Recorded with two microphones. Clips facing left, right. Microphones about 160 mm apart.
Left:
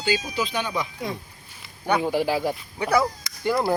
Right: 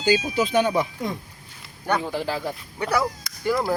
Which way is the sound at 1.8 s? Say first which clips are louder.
Left 3 dB; 10° left (ahead or behind).